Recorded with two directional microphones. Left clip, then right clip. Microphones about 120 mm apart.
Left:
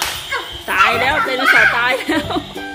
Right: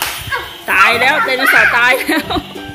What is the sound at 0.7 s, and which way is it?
Speech, centre (ahead or behind).